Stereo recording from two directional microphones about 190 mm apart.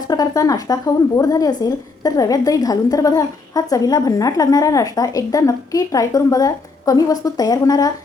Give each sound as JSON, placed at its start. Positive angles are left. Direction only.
{"t": 0.1, "sound": "a woman's voice", "side_deg": 20}